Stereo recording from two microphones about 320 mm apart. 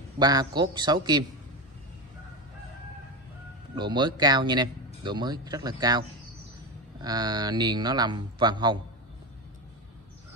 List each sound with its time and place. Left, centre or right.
0.2 s speech: centre
3.7 s speech: centre